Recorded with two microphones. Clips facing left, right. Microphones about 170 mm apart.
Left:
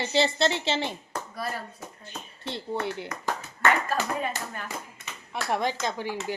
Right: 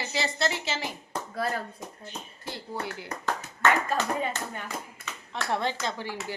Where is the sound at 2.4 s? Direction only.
25° left (ahead or behind).